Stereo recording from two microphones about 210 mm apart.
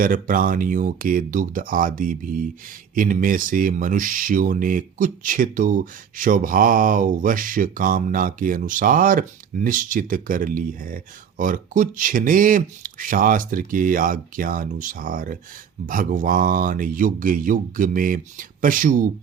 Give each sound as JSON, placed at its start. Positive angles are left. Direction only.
{"t": 0.0, "sound": "speech", "side_deg": -40}